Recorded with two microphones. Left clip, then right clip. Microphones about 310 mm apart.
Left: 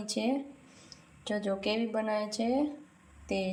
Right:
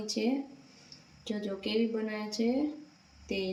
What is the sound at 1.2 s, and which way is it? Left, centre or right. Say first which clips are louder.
A woman's voice: left 5 dB; centre.